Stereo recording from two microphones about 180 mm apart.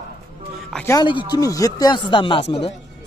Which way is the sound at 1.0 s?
25° left (ahead or behind).